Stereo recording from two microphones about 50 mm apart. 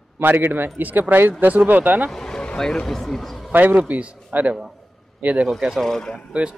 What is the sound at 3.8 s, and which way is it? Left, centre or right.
A man's voice, right.